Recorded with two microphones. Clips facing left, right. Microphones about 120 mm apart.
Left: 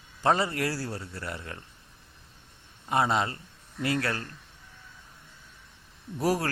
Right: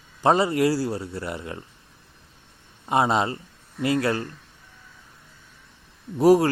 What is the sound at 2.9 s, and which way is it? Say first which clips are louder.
Speech: right 4 dB; 20° right (ahead or behind).